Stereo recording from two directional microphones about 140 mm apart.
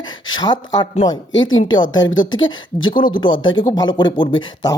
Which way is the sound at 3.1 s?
35° left (ahead or behind).